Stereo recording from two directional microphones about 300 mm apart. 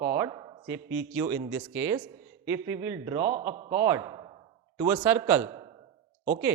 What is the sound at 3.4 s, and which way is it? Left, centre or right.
Speech, right.